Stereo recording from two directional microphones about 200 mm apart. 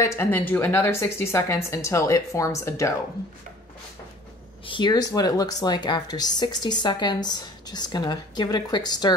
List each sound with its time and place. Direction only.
0.0 s speech: 10° left (ahead or behind)
4.6 s speech: 20° left (ahead or behind)